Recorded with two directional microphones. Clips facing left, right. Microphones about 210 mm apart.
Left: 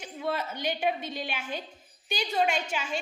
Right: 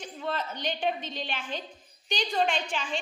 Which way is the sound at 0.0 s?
10° left (ahead or behind).